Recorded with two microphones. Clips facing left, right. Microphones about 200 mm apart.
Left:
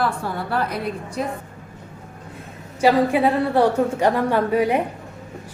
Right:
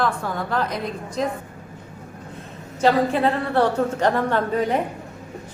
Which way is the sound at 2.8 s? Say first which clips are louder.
Left 2 dB; 15° left (ahead or behind).